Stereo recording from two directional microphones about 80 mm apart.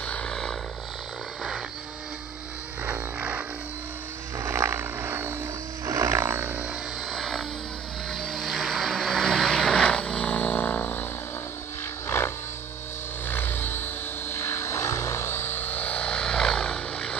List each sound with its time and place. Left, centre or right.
0.0 s vehicle: centre
2.8 s music: centre
4.4 s vehicle: right
5.9 s wild animals: right
7.1 s music: centre
8.1 s vehicle: centre; by 11.1 s left
12.1 s a sound: left
13.3 s vehicle: left; by 17.2 s centre